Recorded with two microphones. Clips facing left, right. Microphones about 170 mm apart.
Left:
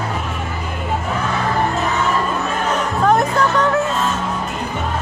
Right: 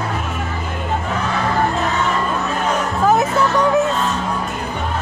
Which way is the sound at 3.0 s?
5° right (ahead or behind).